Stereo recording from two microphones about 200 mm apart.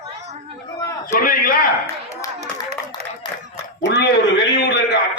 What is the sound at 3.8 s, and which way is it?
A man's voice, 60° left (ahead or behind).